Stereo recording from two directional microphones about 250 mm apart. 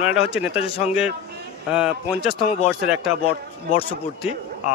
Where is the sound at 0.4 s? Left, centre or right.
Centre.